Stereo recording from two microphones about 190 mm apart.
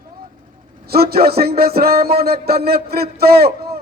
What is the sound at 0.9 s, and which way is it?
A man's voice, 55° right (ahead or behind).